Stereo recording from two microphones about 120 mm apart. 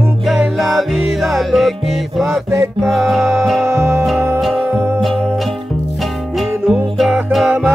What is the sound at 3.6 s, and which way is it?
Music, 20° right (ahead or behind).